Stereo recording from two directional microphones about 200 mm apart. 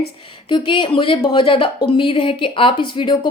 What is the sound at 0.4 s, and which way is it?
Speech, 25° left (ahead or behind).